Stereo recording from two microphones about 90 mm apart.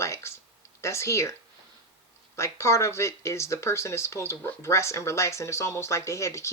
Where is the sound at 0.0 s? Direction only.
30° left (ahead or behind).